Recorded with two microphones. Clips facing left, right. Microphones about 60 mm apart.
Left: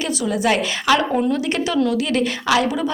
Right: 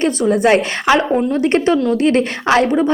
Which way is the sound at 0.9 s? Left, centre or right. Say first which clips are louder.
Right 4 dB; right.